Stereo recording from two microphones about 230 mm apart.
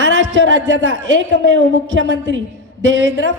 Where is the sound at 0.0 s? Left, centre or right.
Right.